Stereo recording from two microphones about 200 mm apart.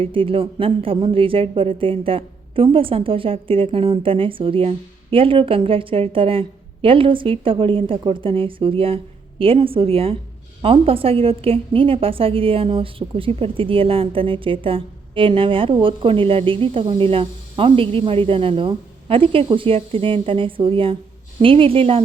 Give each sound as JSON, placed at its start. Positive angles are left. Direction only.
{"t": 0.0, "sound": "a woman's voice", "side_deg": -25}